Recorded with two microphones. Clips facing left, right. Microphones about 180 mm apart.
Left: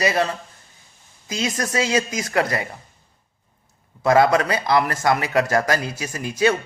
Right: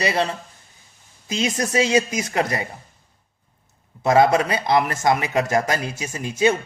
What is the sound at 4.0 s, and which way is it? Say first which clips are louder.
A man's voice: even; 20° right (ahead or behind).